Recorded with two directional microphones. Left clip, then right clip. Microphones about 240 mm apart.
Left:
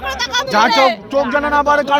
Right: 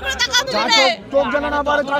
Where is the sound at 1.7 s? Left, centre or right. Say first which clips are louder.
Left 3 dB; left.